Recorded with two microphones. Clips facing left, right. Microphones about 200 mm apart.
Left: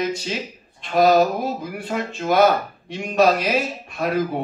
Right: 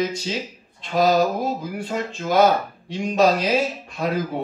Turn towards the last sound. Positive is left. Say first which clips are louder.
# left 2 dB
turn(degrees=55)  # may be behind; listen again after turning